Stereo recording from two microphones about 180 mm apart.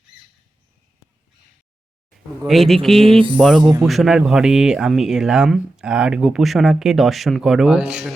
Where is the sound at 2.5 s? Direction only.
Centre (ahead or behind).